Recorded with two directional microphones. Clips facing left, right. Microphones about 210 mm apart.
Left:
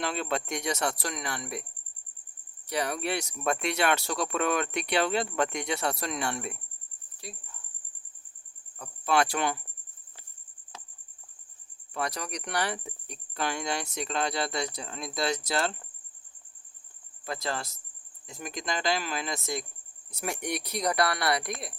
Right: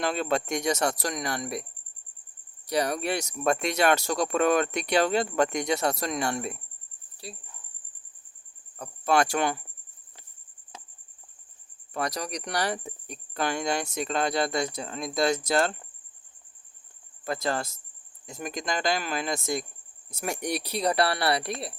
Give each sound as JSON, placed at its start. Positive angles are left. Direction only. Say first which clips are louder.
{"t": 0.0, "sound": "speech", "louder": "right 4 dB", "side_deg": -45}
{"t": 2.6, "sound": "speech", "louder": "right 4 dB", "side_deg": -40}
{"t": 8.8, "sound": "speech", "louder": "right 2 dB", "side_deg": -45}
{"t": 11.9, "sound": "speech", "louder": "right 3 dB", "side_deg": -40}
{"t": 17.2, "sound": "speech", "louder": "right 5 dB", "side_deg": -50}